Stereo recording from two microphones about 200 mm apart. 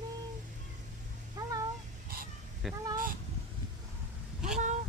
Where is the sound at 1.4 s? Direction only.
20° right (ahead or behind).